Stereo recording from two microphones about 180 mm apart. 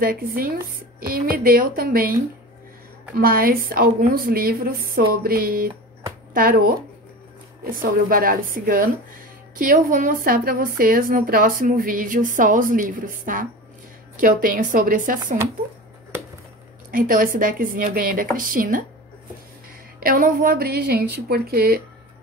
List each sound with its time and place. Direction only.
0.0 s a woman's voice: 55° right (ahead or behind)
3.2 s a woman's voice: 55° right (ahead or behind)
7.7 s a woman's voice: 50° right (ahead or behind)
16.9 s a woman's voice: 50° right (ahead or behind)
20.0 s a woman's voice: 55° right (ahead or behind)